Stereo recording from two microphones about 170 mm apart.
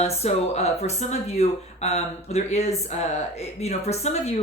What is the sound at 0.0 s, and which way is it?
Speech, 40° left (ahead or behind).